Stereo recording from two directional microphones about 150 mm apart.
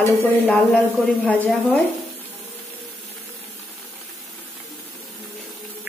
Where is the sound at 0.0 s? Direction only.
15° left (ahead or behind).